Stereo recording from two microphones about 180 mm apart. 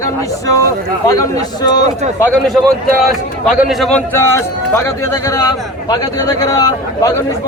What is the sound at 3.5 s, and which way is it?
Speech, centre (ahead or behind).